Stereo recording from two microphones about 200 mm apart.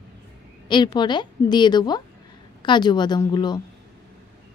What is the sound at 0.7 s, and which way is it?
Speech, 20° left (ahead or behind).